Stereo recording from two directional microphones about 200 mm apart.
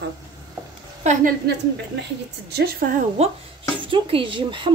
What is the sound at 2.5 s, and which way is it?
Speech, 50° right (ahead or behind).